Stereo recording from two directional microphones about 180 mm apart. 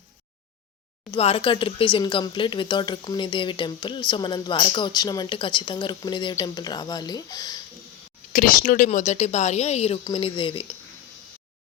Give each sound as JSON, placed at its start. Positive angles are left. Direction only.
{"t": 1.1, "sound": "speech", "side_deg": 30}
{"t": 8.3, "sound": "a woman's voice", "side_deg": 50}